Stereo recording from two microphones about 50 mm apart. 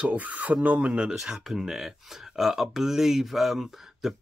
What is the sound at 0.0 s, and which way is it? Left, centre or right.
Speech, right.